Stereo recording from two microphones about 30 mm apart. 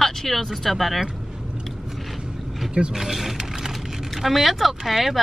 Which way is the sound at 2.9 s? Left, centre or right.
Centre.